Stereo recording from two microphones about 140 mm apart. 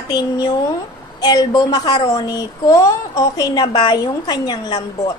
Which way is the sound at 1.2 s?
30° left (ahead or behind).